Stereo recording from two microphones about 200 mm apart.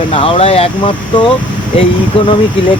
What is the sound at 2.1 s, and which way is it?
Speech, 25° left (ahead or behind).